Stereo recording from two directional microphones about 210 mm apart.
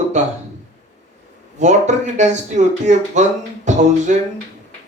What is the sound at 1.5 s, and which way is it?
Speech, 35° right (ahead or behind).